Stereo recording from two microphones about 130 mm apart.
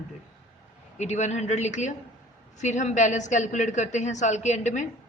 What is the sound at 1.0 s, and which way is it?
A woman's voice, 65° left (ahead or behind).